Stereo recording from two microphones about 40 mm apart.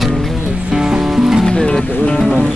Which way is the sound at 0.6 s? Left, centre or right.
Centre.